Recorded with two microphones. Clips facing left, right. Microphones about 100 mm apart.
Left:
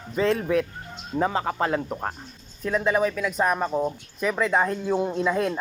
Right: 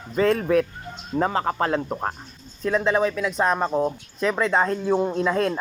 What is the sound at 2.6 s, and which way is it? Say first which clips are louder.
Speech: right 2 dB; 5° left (ahead or behind).